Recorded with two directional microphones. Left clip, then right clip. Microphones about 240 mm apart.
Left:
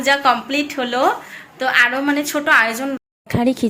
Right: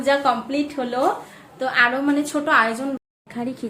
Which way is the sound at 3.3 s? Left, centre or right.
Left.